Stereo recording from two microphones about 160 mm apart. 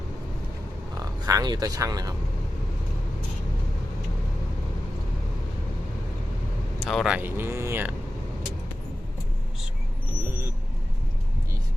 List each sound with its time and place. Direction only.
0.9 s speech: 20° right (ahead or behind)
6.7 s speech: centre (ahead or behind)
7.2 s speech: 15° right (ahead or behind)